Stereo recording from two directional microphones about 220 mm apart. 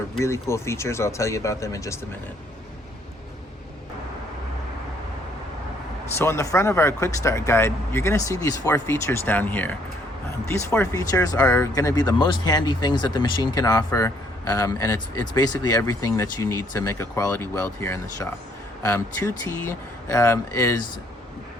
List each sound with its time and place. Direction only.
0.2 s speech: 15° left (ahead or behind)
6.1 s speech: 15° left (ahead or behind)